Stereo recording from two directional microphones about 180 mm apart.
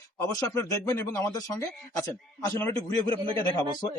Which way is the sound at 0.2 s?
15° left (ahead or behind).